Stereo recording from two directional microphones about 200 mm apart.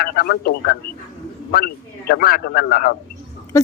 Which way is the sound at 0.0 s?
50° left (ahead or behind).